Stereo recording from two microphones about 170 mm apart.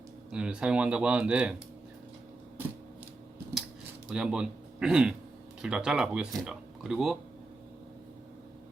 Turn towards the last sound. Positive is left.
turn(degrees=0)  # may be behind; listen again after turning